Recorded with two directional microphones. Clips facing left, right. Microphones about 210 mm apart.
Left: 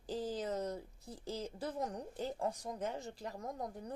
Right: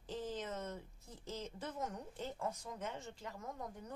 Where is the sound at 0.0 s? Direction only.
35° left (ahead or behind).